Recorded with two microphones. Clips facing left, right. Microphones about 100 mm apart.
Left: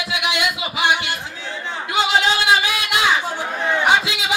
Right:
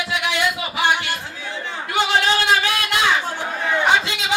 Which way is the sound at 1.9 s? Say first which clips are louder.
Even; 15° left (ahead or behind).